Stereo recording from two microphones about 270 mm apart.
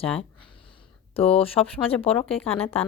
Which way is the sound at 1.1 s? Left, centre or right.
Left.